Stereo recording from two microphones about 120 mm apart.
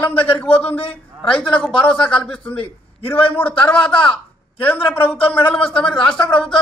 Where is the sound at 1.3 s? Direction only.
10° left (ahead or behind).